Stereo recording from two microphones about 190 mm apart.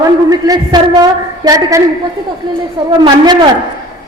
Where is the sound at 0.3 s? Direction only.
20° right (ahead or behind).